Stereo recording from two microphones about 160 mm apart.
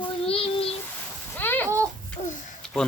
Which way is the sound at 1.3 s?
10° left (ahead or behind).